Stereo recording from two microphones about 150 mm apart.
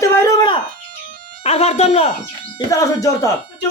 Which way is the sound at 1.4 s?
45° left (ahead or behind).